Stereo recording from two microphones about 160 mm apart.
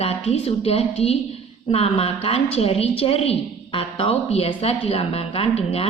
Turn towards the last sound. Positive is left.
turn(degrees=35)  # may be behind; listen again after turning